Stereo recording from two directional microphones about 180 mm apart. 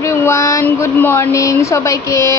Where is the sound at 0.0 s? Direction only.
15° left (ahead or behind).